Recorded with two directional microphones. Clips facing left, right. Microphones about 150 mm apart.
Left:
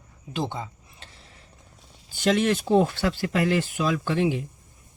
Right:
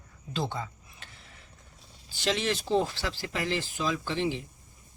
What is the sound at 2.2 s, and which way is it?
Speech, 50° left (ahead or behind).